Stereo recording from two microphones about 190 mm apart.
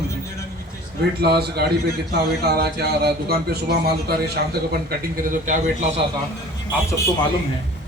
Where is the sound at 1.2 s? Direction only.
60° right (ahead or behind).